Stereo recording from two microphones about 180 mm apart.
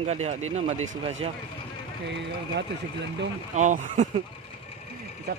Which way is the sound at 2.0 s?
75° right (ahead or behind).